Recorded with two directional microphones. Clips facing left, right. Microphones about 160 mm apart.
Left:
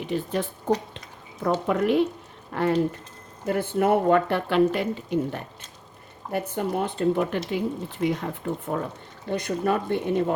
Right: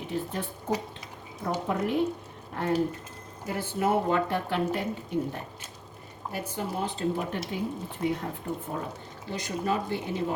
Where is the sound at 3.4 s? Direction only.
55° left (ahead or behind); by 5.4 s 85° left.